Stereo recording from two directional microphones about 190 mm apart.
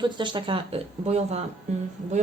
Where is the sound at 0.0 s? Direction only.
25° right (ahead or behind).